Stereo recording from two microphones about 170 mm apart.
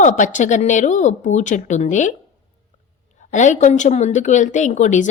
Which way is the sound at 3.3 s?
45° left (ahead or behind).